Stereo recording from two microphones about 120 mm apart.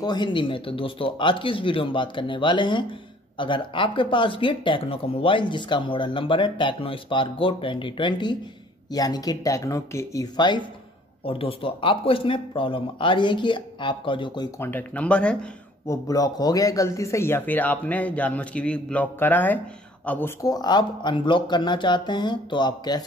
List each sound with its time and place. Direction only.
0.0 s speech: 40° left (ahead or behind)
11.2 s speech: 50° left (ahead or behind)
14.6 s speech: 15° left (ahead or behind)
15.9 s speech: 30° left (ahead or behind)
20.4 s speech: 35° left (ahead or behind)